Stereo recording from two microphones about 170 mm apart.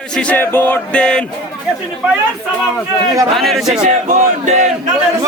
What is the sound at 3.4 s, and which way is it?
Speech, centre (ahead or behind).